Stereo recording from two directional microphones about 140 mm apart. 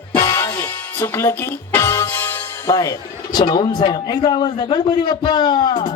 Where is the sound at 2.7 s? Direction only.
25° left (ahead or behind).